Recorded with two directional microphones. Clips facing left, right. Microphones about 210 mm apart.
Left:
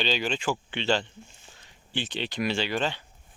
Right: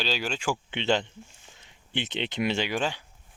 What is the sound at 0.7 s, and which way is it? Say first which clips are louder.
Speech: right 2 dB; 20° right (ahead or behind).